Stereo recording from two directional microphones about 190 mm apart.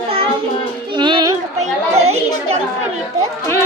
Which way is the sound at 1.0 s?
25° right (ahead or behind).